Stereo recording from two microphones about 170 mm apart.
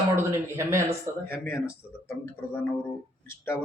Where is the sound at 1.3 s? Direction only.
10° left (ahead or behind).